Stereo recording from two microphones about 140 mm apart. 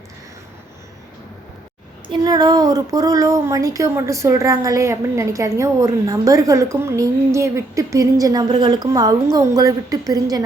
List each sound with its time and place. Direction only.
2.2 s speech: 30° right (ahead or behind)